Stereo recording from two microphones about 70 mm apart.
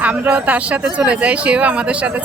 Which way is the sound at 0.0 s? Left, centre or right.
Right.